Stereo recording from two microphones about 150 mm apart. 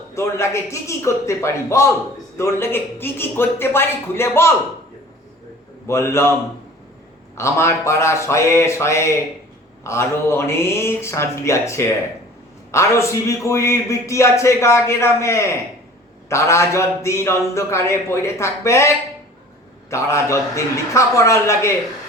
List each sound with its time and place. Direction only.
0.1 s a man's voice: 20° left (ahead or behind)
5.9 s a man's voice: 15° left (ahead or behind)
7.3 s a man's voice: 20° left (ahead or behind)